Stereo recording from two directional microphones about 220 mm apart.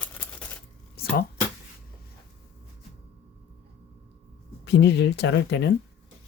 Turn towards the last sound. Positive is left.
turn(degrees=50)  # may be behind; listen again after turning